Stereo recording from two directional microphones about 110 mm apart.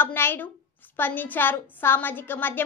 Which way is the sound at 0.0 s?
20° left (ahead or behind).